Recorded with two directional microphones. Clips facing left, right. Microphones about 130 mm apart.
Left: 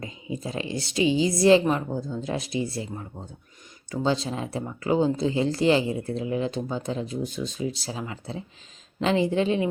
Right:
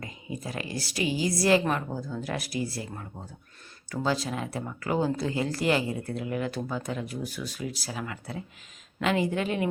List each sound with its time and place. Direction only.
0.0 s speech: 25° left (ahead or behind)
3.9 s speech: 25° left (ahead or behind)